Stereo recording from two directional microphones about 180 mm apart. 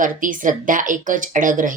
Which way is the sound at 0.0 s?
45° right (ahead or behind).